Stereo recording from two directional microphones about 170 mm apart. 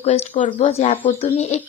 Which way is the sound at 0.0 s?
40° left (ahead or behind).